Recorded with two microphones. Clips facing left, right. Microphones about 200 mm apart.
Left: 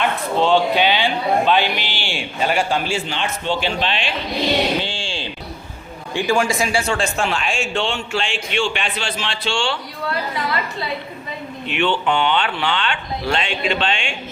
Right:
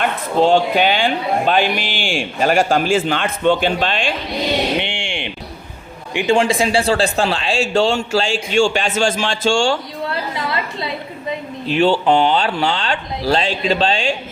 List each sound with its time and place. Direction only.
0.0 s a man's voice: 45° right (ahead or behind)
4.8 s a sound: 20° right (ahead or behind)
6.1 s speech: 25° right (ahead or behind); by 9.7 s 45° right (ahead or behind)
11.6 s speech: 35° right (ahead or behind)